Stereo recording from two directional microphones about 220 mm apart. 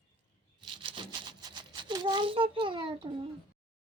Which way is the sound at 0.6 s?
20° right (ahead or behind).